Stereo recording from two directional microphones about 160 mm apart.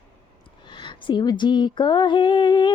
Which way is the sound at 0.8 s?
30° left (ahead or behind).